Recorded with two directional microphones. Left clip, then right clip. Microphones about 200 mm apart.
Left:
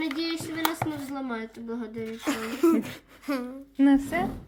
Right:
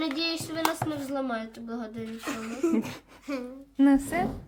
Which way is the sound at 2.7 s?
10° right (ahead or behind).